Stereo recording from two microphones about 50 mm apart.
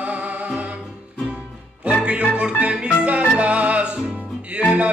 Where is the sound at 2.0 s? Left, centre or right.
Right.